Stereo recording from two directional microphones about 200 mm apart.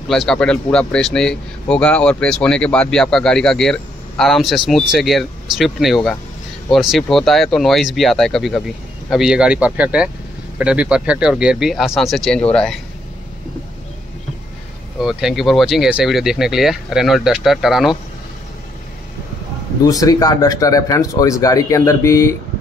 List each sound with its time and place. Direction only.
0.1 s a man's voice: 5° left (ahead or behind)
15.0 s a man's voice: centre (ahead or behind)
19.8 s speech: 20° left (ahead or behind)